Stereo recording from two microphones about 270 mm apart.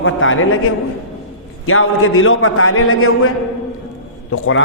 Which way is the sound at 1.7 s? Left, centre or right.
Left.